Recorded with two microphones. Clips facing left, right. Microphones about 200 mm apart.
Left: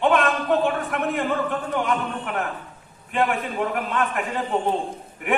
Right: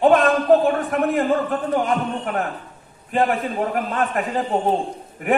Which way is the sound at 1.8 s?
40° right (ahead or behind).